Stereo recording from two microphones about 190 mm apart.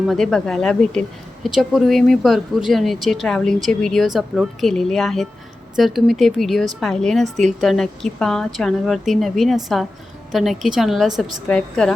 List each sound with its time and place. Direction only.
0.0 s speech: centre (ahead or behind)